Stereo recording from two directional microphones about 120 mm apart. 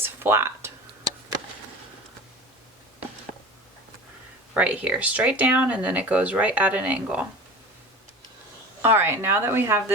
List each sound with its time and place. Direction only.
0.0 s a sound: 20° right (ahead or behind)
4.5 s speech: 10° right (ahead or behind)
8.8 s speech: 20° right (ahead or behind)